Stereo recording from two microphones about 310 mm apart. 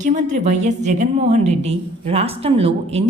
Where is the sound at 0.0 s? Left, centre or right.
Right.